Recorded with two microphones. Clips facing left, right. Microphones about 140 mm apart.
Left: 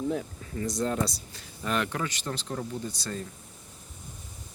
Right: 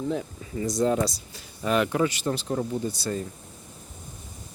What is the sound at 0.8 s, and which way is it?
Speech, 10° right (ahead or behind).